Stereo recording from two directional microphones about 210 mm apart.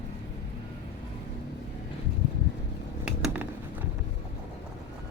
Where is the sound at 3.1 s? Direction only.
5° right (ahead or behind).